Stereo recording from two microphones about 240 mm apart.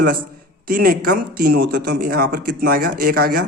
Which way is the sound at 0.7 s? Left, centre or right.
Right.